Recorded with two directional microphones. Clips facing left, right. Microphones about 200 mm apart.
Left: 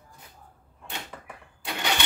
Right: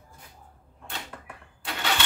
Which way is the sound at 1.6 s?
15° left (ahead or behind).